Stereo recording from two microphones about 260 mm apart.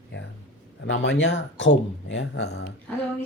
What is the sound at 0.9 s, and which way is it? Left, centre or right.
Speech, left.